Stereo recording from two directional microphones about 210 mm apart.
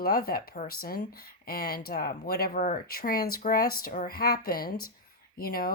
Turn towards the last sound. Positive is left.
turn(degrees=45)  # may be behind; listen again after turning